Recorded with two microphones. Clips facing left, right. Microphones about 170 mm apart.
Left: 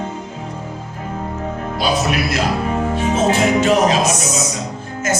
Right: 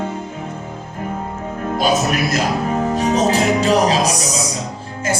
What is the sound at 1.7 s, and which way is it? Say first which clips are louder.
Music: right 1 dB; 45° right (ahead or behind).